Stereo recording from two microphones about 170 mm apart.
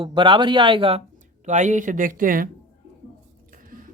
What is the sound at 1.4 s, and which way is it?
Speech, 45° right (ahead or behind).